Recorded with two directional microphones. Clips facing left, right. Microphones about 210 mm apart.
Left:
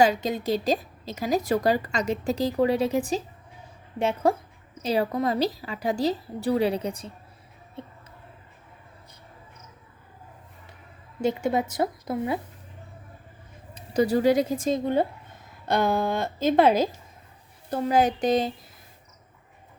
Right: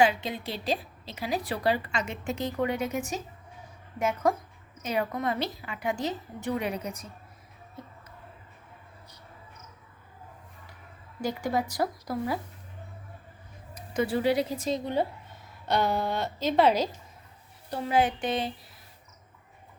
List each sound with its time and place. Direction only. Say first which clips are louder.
0.0 s a woman's voice: left 3 dB; 40° left (ahead or behind)
7.8 s a sound: left 5 dB; 30° left (ahead or behind)
11.2 s a woman's voice: left 5 dB; 25° left (ahead or behind)
13.7 s a woman's voice: left 5 dB; 35° left (ahead or behind)